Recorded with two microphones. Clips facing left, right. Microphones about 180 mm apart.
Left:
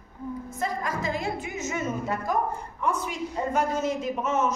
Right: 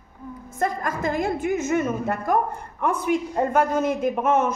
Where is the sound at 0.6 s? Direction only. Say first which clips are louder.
Right 5 dB; 50° right (ahead or behind).